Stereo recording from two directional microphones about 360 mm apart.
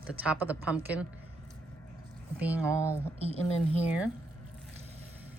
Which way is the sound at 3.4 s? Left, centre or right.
Centre.